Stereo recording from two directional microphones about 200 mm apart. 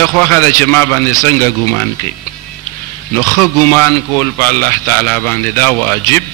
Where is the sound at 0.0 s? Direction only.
10° left (ahead or behind).